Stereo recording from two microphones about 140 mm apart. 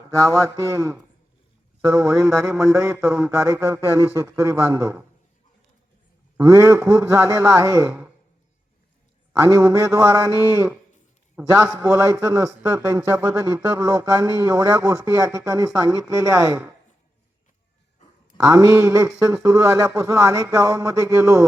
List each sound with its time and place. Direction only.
0.3 s speech: 20° right (ahead or behind)
3.1 s a man's voice: 5° right (ahead or behind)
3.3 s speech: 20° right (ahead or behind)
6.3 s a man's voice: 25° right (ahead or behind)
7.9 s speech: 10° right (ahead or behind)
9.5 s speech: 25° right (ahead or behind)
11.3 s a man's voice: 5° right (ahead or behind)
11.8 s speech: 25° right (ahead or behind)
18.4 s speech: 25° right (ahead or behind)